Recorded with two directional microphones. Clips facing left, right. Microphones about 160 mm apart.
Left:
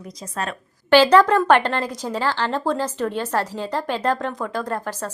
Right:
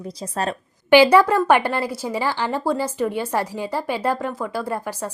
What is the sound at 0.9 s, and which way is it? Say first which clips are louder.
Speech: right 1 dB; 10° right (ahead or behind).